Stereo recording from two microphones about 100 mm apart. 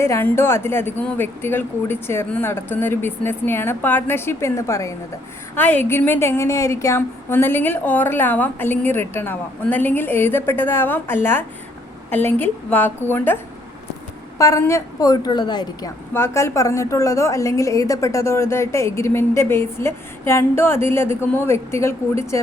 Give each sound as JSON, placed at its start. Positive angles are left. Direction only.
{"t": 0.0, "sound": "a woman's voice", "side_deg": 25}
{"t": 5.5, "sound": "a woman's voice", "side_deg": 15}
{"t": 14.3, "sound": "a woman's voice", "side_deg": 30}
{"t": 16.1, "sound": "a woman's voice", "side_deg": 25}